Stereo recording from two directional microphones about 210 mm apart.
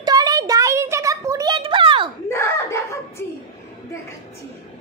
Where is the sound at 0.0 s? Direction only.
20° right (ahead or behind).